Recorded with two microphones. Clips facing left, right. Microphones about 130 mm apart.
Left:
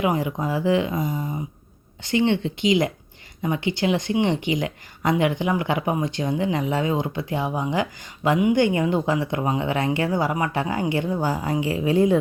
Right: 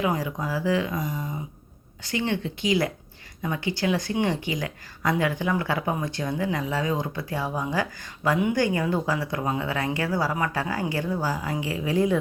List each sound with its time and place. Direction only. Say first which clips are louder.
0.0 s speech: left 3 dB; 20° left (ahead or behind)